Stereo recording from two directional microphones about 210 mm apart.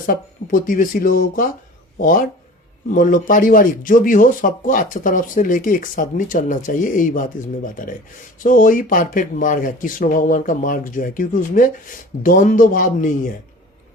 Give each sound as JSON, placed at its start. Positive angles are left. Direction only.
{"t": 0.1, "sound": "speech", "side_deg": 40}